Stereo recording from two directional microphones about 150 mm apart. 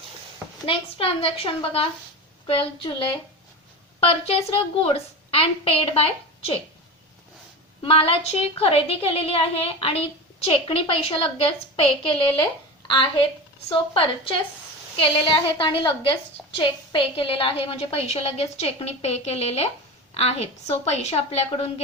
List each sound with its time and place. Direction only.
0.6 s a woman's voice: 40° left (ahead or behind)
7.8 s a woman's voice: 40° left (ahead or behind)
13.7 s a woman's voice: 35° left (ahead or behind)